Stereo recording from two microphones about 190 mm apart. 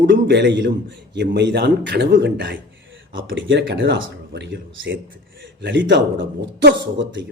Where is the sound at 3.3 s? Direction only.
80° right.